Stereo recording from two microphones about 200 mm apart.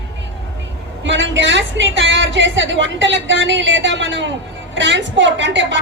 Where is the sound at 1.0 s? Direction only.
70° right (ahead or behind).